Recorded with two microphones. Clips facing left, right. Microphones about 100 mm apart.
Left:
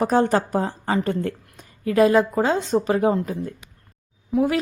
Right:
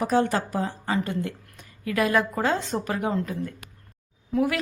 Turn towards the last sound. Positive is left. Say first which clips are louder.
# left 3 dB
turn(degrees=25)  # may be behind; listen again after turning